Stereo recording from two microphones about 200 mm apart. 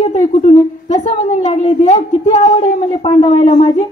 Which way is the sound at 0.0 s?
35° left (ahead or behind).